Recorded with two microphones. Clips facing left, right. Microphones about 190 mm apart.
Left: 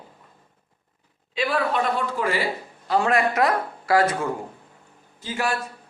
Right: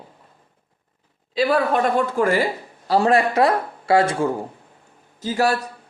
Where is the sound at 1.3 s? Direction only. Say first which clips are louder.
Right 5 dB; 40° right (ahead or behind).